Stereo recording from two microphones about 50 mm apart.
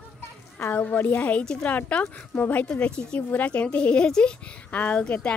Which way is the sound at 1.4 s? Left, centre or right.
Centre.